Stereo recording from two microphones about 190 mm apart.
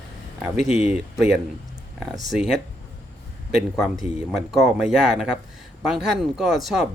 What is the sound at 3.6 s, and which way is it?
Speech, 5° right (ahead or behind).